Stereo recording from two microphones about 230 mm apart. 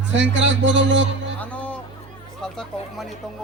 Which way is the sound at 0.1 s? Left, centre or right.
Right.